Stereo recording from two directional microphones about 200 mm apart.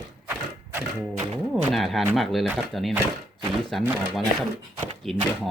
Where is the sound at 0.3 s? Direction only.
5° right (ahead or behind).